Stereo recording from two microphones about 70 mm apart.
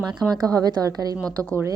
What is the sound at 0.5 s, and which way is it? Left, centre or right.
Speech, right.